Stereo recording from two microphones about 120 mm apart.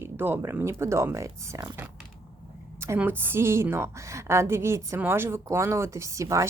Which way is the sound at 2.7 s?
20° right (ahead or behind).